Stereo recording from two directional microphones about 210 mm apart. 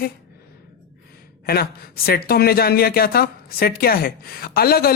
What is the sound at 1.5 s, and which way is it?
Speech, 45° left (ahead or behind).